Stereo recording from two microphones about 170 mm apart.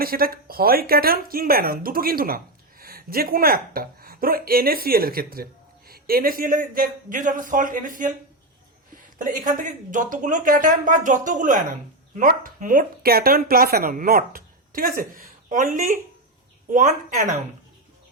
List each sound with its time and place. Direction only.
0.0 s speech: 60° right (ahead or behind)
9.1 s speech: 50° right (ahead or behind)